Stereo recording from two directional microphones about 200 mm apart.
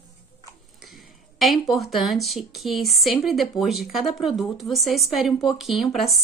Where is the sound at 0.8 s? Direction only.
Centre (ahead or behind).